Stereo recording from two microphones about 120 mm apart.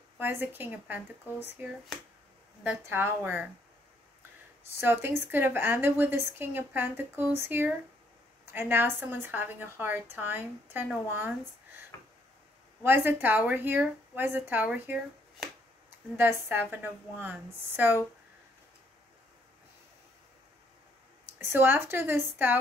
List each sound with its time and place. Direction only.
0.2 s a woman's voice: 15° right (ahead or behind)
2.6 s a woman's voice: 15° right (ahead or behind)
4.7 s a woman's voice: 20° right (ahead or behind)
12.8 s a woman's voice: 15° right (ahead or behind)
16.2 s a woman's voice: 15° right (ahead or behind)
21.4 s speech: 20° right (ahead or behind)